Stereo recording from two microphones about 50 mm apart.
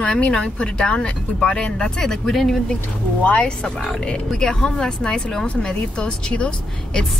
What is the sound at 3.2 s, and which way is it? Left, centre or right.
Speech, left.